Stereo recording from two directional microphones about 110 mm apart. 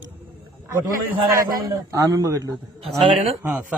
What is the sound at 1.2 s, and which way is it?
A man's voice, 35° right (ahead or behind).